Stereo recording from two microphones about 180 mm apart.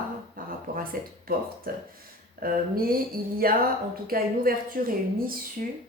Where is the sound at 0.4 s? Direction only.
50° right (ahead or behind).